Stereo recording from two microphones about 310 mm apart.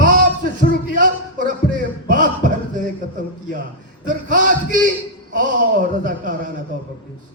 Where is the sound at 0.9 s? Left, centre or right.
Right.